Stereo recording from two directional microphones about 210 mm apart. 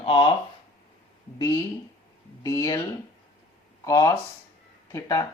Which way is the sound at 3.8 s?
15° left (ahead or behind).